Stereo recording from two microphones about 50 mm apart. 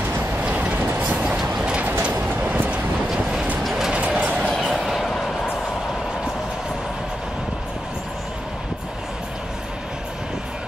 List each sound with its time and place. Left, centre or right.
0.4 s train: right
3.1 s vehicle: centre
3.9 s vehicle: right
4.5 s a sound: centre